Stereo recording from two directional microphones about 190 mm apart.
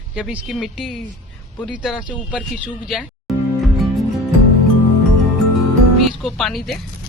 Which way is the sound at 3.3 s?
Centre (ahead or behind).